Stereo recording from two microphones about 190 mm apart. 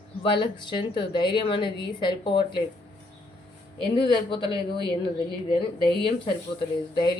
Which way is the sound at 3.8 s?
25° left (ahead or behind).